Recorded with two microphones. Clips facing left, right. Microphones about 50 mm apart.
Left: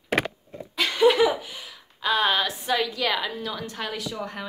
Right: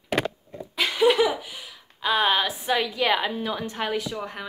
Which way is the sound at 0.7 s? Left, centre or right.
Centre.